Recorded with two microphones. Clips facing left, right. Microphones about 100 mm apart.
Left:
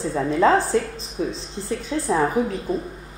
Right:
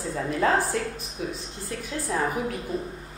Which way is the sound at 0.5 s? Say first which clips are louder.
Left 6 dB; 30° left (ahead or behind).